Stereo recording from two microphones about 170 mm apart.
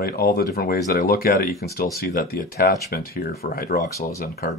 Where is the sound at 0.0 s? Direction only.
60° left (ahead or behind).